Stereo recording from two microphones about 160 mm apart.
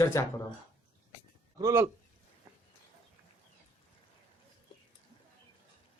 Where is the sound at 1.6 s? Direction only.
20° right (ahead or behind).